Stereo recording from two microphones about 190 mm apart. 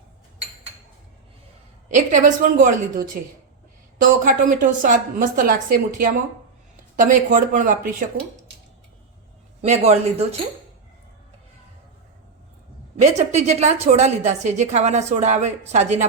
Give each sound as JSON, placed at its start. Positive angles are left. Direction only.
{"t": 1.9, "sound": "a woman's voice", "side_deg": -40}
{"t": 4.0, "sound": "a woman's voice", "side_deg": -45}
{"t": 9.6, "sound": "a woman's voice", "side_deg": -35}
{"t": 13.0, "sound": "a woman's voice", "side_deg": -35}